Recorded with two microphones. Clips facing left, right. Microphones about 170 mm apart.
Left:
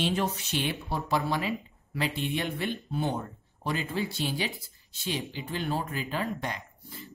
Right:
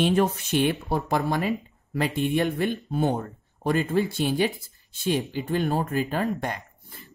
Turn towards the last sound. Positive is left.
turn(degrees=-50)  # may be behind; listen again after turning